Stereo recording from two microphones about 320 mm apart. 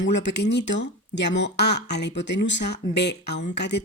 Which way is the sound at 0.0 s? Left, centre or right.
Left.